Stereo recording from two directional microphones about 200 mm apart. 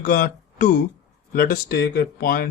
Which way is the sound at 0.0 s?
40° left (ahead or behind).